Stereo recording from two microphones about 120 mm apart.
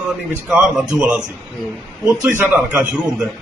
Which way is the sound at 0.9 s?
10° right (ahead or behind).